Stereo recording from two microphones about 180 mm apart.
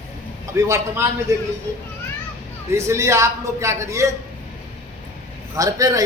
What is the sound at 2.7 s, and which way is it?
A man's voice, 15° right (ahead or behind).